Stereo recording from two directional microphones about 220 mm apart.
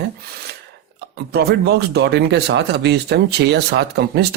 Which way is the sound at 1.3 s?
45° right (ahead or behind).